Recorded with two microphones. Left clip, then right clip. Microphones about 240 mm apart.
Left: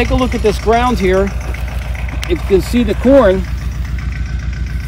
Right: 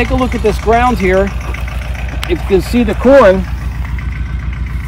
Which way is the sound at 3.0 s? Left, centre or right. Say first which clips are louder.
Right 3 dB; centre.